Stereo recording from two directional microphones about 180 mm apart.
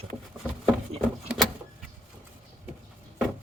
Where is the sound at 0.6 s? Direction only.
Centre (ahead or behind).